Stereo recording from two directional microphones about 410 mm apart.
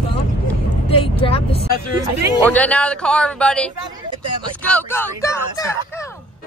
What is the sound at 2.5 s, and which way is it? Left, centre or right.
Speech, centre.